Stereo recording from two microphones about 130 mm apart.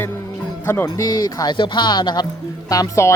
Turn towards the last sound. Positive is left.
turn(degrees=25)  # may be behind; listen again after turning